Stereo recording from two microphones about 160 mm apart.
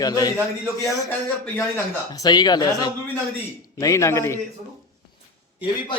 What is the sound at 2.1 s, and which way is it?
A man's voice, 25° left (ahead or behind).